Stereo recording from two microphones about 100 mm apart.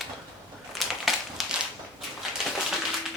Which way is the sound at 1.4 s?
Centre (ahead or behind).